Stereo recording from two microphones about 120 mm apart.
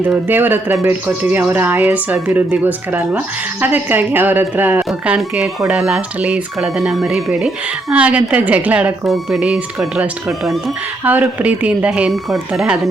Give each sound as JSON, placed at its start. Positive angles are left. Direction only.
{"t": 0.0, "sound": "speech", "side_deg": -15}
{"t": 11.0, "sound": "speech", "side_deg": -15}